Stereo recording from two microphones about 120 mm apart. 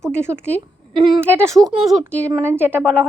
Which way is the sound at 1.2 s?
20° right (ahead or behind).